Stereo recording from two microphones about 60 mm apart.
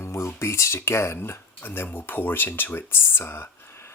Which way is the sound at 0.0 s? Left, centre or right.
Left.